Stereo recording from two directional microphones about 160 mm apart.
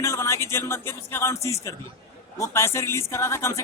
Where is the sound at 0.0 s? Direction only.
20° left (ahead or behind).